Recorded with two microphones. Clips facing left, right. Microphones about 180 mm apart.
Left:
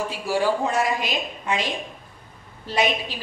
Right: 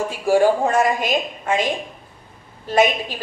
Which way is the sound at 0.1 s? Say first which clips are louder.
Right 9 dB; 50° right (ahead or behind).